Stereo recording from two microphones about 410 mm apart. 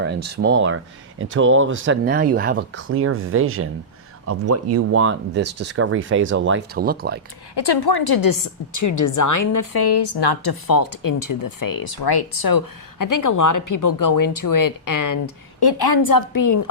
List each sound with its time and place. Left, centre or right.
0.0 s speech: right
7.5 s speech: left
9.8 s speech: left
15.6 s a woman's voice: left